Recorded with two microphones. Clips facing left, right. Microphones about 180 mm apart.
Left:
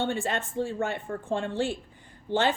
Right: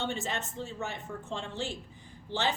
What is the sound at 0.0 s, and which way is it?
A woman's voice, 55° left (ahead or behind).